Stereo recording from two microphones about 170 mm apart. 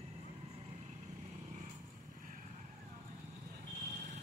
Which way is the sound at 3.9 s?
45° right (ahead or behind).